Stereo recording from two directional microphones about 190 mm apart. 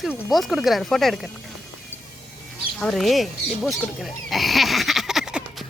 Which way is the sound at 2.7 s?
Centre (ahead or behind).